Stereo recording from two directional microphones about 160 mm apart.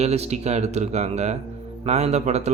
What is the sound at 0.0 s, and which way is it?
A man's voice, 40° right (ahead or behind).